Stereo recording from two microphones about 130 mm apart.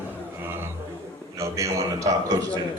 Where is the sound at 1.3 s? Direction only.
25° right (ahead or behind).